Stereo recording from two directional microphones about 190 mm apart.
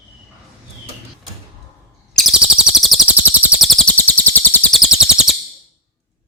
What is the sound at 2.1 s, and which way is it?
Chirp, centre (ahead or behind).